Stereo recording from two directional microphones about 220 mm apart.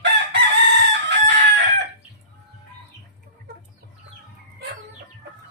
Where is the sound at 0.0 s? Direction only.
55° right (ahead or behind).